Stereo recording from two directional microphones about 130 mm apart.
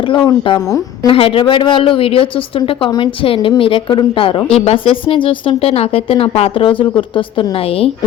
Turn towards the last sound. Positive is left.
turn(degrees=45)  # may be behind; listen again after turning